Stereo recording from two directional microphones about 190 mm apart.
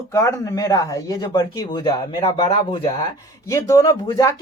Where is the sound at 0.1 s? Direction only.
15° left (ahead or behind).